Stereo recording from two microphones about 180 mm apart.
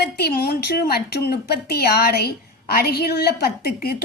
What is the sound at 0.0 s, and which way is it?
A woman's voice, 60° left (ahead or behind).